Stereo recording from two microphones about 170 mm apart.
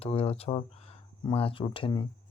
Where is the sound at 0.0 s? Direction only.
35° left (ahead or behind).